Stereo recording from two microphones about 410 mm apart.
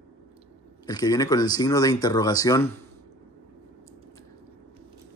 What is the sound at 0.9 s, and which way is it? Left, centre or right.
Speech, centre.